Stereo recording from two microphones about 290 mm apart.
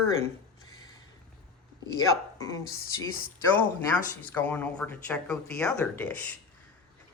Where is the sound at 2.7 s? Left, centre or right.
Left.